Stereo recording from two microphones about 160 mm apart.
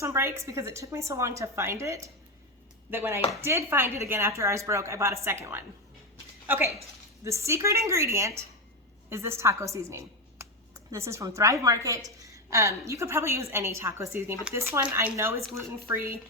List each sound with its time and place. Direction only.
0.0 s a woman's voice: 15° right (ahead or behind)